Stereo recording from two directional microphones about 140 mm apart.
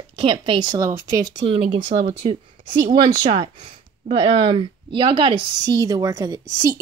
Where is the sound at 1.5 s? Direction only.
35° right (ahead or behind).